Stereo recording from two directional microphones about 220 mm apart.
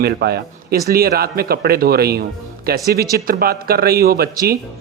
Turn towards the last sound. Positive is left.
turn(degrees=-45)  # may be behind; listen again after turning